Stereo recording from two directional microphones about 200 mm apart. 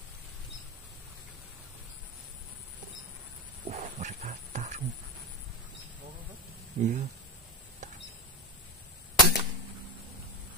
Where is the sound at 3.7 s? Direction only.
35° right (ahead or behind).